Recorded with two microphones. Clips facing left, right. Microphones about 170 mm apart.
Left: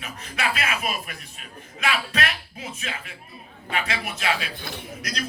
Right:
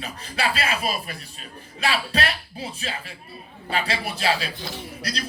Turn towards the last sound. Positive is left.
turn(degrees=-35)  # may be behind; listen again after turning